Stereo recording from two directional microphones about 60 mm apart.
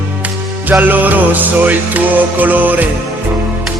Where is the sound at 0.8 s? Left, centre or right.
Right.